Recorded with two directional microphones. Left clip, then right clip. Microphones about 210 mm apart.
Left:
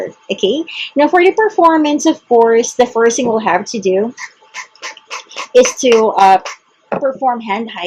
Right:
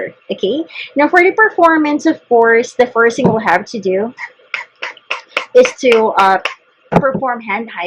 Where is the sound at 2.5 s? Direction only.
10° left (ahead or behind).